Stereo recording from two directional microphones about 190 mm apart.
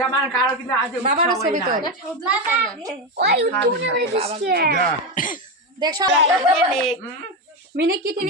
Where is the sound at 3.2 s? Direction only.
55° right (ahead or behind).